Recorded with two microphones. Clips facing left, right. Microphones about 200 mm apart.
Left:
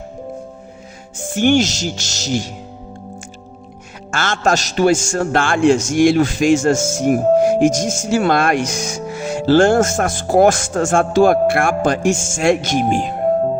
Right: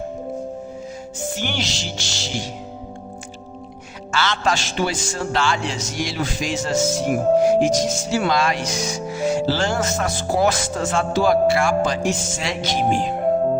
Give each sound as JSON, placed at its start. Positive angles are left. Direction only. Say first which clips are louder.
{"t": 1.2, "sound": "a man's voice", "louder": "left 12 dB", "side_deg": 50}
{"t": 4.1, "sound": "a man's voice", "louder": "left 4 dB", "side_deg": 50}